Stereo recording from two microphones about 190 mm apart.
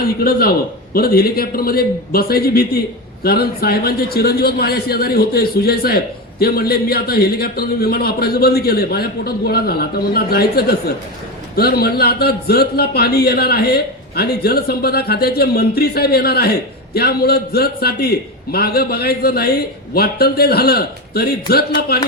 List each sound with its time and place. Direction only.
0.3 s a man's voice: 50° left (ahead or behind)